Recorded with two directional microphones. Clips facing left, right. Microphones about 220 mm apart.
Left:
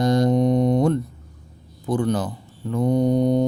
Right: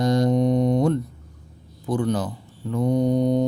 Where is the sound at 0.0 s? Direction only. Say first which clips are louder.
Left 1 dB; 50° left (ahead or behind).